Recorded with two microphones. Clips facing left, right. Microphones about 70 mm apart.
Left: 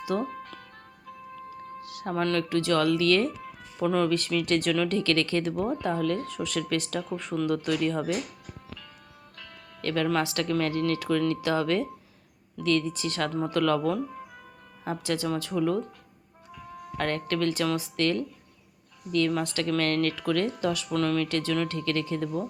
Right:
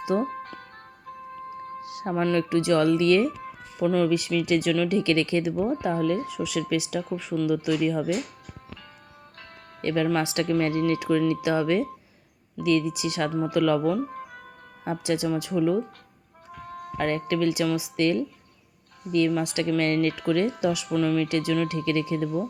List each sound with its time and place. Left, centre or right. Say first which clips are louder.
0.0 s speech: right 4 dB; right
0.3 s music: right 4 dB; right
1.8 s speech: right 2 dB; right
3.8 s speech: right 2 dB; centre
4.9 s speech: right 3 dB; centre
9.8 s speech: right 2 dB; centre
14.0 s music: right 3 dB; right
15.0 s speech: right 4 dB; centre
16.5 s music: right 4 dB; right
17.0 s speech: right 3 dB; centre
19.3 s speech: right 3 dB; centre